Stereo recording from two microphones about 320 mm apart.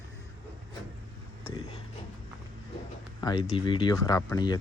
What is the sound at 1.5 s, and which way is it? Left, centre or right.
Speech, centre.